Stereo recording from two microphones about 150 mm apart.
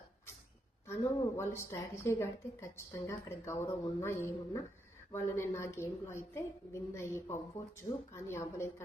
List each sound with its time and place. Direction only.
0.9 s a woman's voice: 20° left (ahead or behind)